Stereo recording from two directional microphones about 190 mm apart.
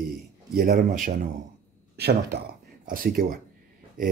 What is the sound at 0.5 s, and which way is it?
Speech, 50° right (ahead or behind).